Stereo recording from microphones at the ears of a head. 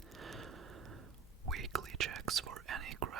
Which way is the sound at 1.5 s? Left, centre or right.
Right.